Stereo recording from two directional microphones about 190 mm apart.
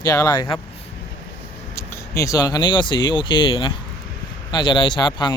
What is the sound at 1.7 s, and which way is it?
Speech, 15° left (ahead or behind).